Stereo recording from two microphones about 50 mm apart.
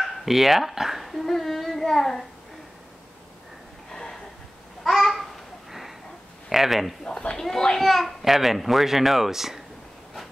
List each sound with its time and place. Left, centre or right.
0.0 s speech: centre
3.9 s a sound: centre
4.8 s babbling: centre
6.5 s a child's voice: centre
7.1 s speech: centre
7.3 s a child's voice: centre